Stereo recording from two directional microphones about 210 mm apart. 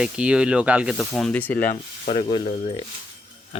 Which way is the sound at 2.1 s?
20° left (ahead or behind).